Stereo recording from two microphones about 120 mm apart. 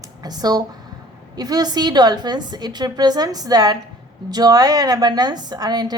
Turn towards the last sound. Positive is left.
turn(degrees=-35)  # may be behind; listen again after turning